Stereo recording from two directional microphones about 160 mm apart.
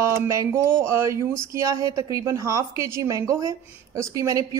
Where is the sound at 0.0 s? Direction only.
20° right (ahead or behind).